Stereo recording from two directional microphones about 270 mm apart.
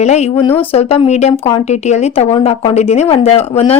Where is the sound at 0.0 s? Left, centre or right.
Left.